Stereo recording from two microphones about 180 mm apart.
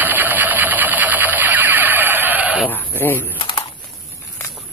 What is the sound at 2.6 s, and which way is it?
Sheep, 10° left (ahead or behind).